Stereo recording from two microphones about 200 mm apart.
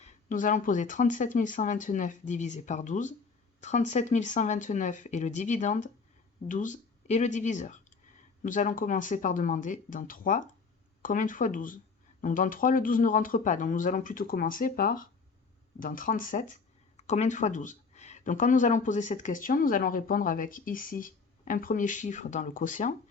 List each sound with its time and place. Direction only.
0.0 s speech: 40° left (ahead or behind)